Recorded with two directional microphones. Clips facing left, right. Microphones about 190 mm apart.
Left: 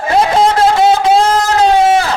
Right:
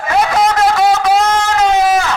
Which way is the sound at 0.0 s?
30° left (ahead or behind).